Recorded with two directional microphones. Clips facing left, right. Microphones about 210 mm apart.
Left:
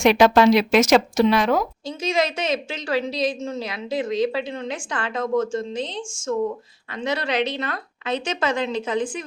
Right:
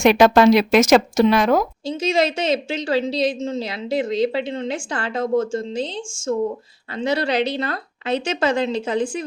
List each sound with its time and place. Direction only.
0.0 s speech: 45° right (ahead or behind)
1.9 s a woman's voice: 30° right (ahead or behind)